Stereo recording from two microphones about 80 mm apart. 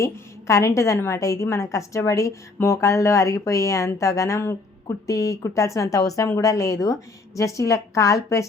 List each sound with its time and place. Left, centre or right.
0.0 s a woman's voice: left